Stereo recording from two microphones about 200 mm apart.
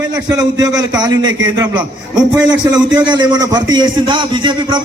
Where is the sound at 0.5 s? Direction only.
20° right (ahead or behind).